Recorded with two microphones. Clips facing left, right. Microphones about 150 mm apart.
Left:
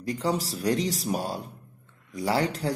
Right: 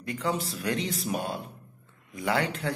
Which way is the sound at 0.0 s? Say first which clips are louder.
Left 3 dB; 35° left (ahead or behind).